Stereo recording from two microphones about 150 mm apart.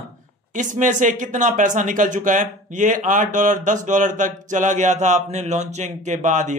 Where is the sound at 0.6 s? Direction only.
55° right (ahead or behind).